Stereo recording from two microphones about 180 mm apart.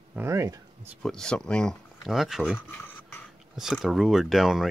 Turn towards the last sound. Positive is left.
turn(degrees=0)  # may be behind; listen again after turning